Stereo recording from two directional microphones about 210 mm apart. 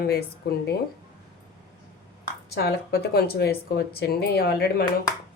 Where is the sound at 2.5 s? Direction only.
50° left (ahead or behind).